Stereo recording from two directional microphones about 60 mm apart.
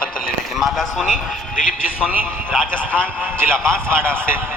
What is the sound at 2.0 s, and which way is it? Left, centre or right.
Speech, right.